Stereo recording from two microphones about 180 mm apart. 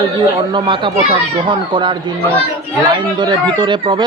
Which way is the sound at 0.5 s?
25° right (ahead or behind).